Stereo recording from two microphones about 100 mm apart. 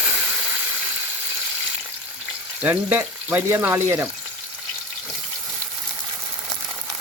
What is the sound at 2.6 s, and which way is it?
Speech, 15° right (ahead or behind).